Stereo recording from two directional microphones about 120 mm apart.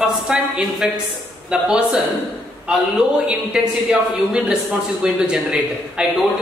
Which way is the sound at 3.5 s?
5° right (ahead or behind).